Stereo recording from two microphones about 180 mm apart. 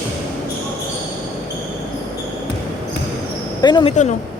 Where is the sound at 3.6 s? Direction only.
25° left (ahead or behind).